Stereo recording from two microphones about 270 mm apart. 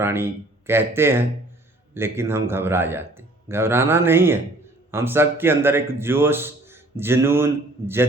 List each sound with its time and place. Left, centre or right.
0.0 s a man's voice: centre